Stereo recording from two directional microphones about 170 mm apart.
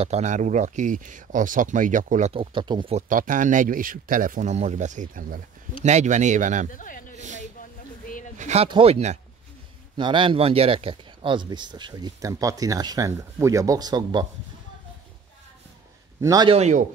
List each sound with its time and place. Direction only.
0.0 s speech: 40° right (ahead or behind)
2.3 s speech: 30° right (ahead or behind)
3.0 s speech: 50° right (ahead or behind)
6.7 s speech: 50° left (ahead or behind)
8.4 s speech: 40° right (ahead or behind); by 14.2 s 25° right (ahead or behind)
16.2 s a man's voice: 20° right (ahead or behind)
16.4 s speech: 40° right (ahead or behind)